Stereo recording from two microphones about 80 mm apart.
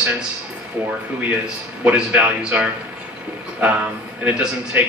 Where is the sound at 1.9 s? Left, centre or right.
Centre.